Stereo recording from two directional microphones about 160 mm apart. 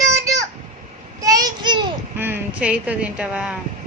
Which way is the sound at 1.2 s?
25° right (ahead or behind).